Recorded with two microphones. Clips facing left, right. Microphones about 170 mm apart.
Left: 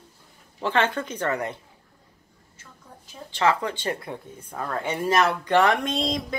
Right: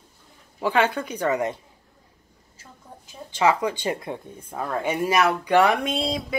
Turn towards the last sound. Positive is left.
turn(degrees=-5)  # may be behind; listen again after turning